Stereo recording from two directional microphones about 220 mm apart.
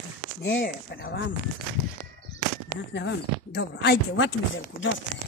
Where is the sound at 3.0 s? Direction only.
50° left (ahead or behind).